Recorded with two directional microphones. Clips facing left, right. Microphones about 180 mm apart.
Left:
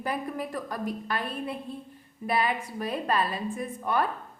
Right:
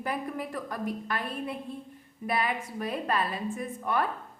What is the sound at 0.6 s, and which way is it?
A woman's voice, 35° left (ahead or behind).